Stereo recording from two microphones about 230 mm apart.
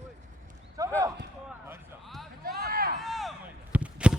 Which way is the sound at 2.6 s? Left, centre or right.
Right.